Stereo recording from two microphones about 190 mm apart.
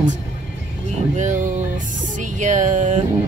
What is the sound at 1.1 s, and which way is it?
Speech, 40° right (ahead or behind).